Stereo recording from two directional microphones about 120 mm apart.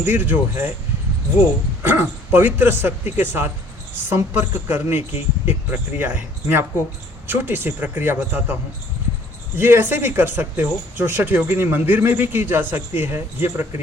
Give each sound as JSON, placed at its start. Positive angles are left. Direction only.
{"t": 0.0, "sound": "speech", "side_deg": -15}
{"t": 1.8, "sound": "speech", "side_deg": -15}
{"t": 4.7, "sound": "speech", "side_deg": -15}
{"t": 9.6, "sound": "speech", "side_deg": -20}